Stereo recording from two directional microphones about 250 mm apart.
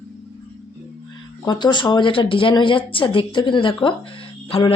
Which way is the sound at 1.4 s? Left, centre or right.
Centre.